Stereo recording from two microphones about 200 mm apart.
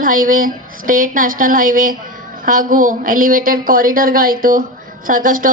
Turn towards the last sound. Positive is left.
turn(degrees=-45)  # may be behind; listen again after turning